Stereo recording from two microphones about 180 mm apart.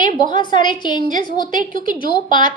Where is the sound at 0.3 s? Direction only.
25° left (ahead or behind).